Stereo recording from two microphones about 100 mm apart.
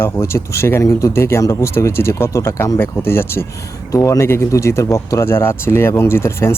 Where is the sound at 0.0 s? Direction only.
30° left (ahead or behind).